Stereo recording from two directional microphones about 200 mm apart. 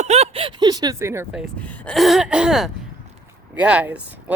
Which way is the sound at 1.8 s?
Centre (ahead or behind).